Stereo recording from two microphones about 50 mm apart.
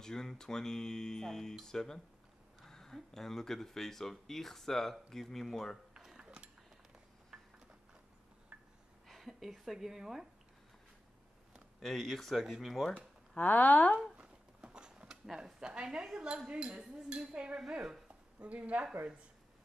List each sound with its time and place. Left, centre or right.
0.0 s speech: centre
5.9 s a sound: centre
8.5 s gasp: right
9.0 s a woman's voice: centre
11.8 s speech: centre
13.4 s speech: left
14.1 s a sound: centre
15.2 s speech: centre
15.6 s a woman's voice: centre